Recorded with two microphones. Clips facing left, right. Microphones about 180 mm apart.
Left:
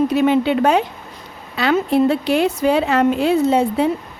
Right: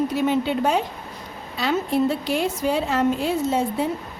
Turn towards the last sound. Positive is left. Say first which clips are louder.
# left 6 dB
turn(degrees=65)  # may be behind; listen again after turning